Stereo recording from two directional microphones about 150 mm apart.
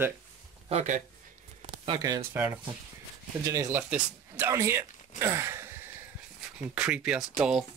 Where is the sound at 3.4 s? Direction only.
20° right (ahead or behind).